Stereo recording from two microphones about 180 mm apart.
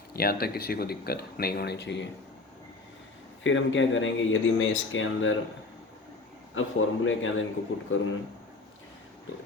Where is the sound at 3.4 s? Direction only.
90° left.